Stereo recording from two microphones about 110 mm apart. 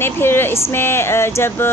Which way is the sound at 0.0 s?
20° left (ahead or behind).